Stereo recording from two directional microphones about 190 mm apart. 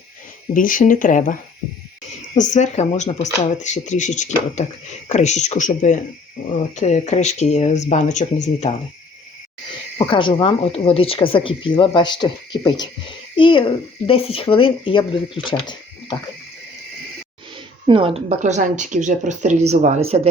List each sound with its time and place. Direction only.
0.5 s speech: 45° left (ahead or behind)
10.1 s speech: 25° left (ahead or behind)
15.6 s a sound: 25° left (ahead or behind)
17.8 s speech: 30° right (ahead or behind)